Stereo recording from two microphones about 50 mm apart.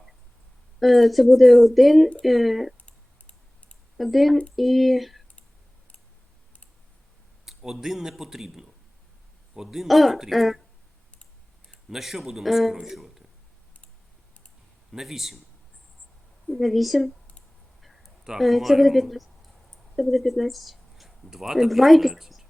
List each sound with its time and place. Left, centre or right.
0.8 s speech: centre
2.8 s typing: left
3.9 s speech: centre
7.4 s a man's voice: centre
11.9 s speech: centre
14.9 s a man's voice: centre
16.6 s speech: centre
17.8 s a sound: centre
18.3 s speech: centre